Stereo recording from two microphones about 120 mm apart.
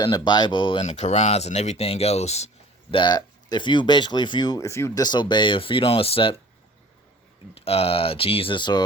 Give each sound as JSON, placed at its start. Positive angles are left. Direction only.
{"t": 0.0, "sound": "speech", "side_deg": 35}
{"t": 0.8, "sound": "speech", "side_deg": 75}
{"t": 2.9, "sound": "speech", "side_deg": 40}
{"t": 5.0, "sound": "speech", "side_deg": 40}
{"t": 7.5, "sound": "speech", "side_deg": 55}